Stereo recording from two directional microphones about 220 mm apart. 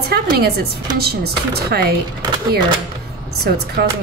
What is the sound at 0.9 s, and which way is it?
Speech, 45° right (ahead or behind).